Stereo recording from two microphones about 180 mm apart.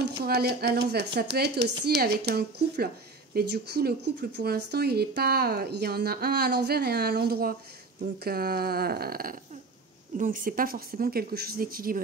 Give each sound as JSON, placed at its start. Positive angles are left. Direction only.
{"t": 0.2, "sound": "speech", "side_deg": -60}